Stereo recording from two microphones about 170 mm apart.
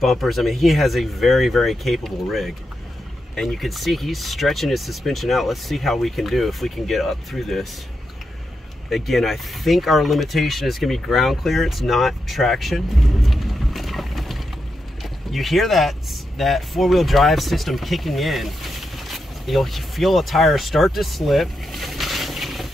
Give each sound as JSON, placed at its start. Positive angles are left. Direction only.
{"t": 0.0, "sound": "speech", "side_deg": 0}
{"t": 8.9, "sound": "speech", "side_deg": 0}